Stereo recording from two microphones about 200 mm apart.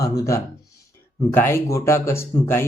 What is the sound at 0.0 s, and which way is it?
Speech, 15° left (ahead or behind).